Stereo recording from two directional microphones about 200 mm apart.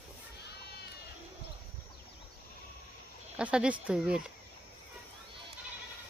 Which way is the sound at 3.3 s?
5° right (ahead or behind).